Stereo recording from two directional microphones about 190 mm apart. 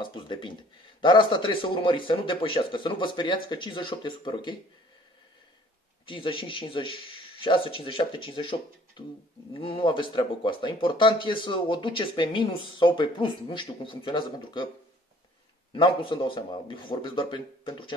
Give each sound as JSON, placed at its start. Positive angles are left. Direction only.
{"t": 0.0, "sound": "speech", "side_deg": 25}
{"t": 6.0, "sound": "speech", "side_deg": 25}
{"t": 15.7, "sound": "speech", "side_deg": 25}